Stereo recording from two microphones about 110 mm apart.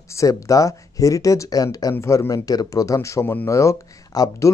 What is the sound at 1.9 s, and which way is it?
Speech, 20° left (ahead or behind).